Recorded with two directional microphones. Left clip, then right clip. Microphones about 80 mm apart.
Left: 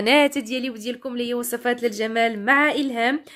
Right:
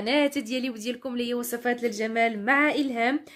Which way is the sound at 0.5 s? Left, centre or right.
Left.